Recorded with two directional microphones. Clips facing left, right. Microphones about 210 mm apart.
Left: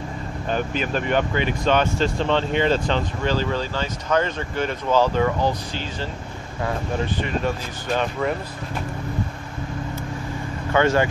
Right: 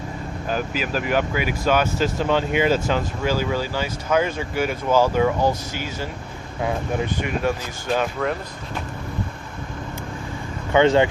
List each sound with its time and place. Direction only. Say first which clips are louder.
0.5 s speech: left 1 dB; 5° right (ahead or behind)
7.2 s speech: right 1 dB; 10° right (ahead or behind)
10.7 s speech: right 3 dB; 20° right (ahead or behind)